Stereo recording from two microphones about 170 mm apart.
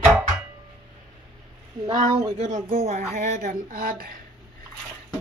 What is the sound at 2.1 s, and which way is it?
Speech, 30° right (ahead or behind).